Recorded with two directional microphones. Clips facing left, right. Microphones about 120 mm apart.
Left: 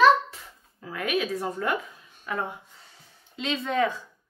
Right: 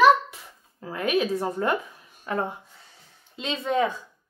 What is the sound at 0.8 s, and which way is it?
Speech, 30° right (ahead or behind).